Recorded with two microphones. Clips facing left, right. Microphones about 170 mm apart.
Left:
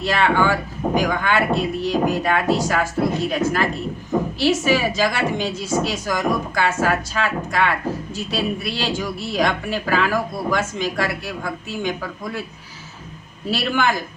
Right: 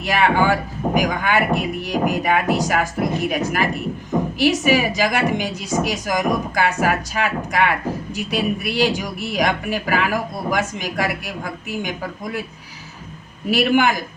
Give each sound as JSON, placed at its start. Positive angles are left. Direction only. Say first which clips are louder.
{"t": 0.0, "sound": "a woman's voice", "louder": "right 1 dB", "side_deg": -15}
{"t": 13.5, "sound": "a woman's voice", "louder": "right 4 dB", "side_deg": -15}